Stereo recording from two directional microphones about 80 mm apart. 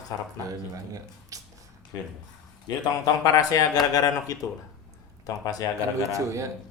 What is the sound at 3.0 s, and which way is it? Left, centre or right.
Speech, left.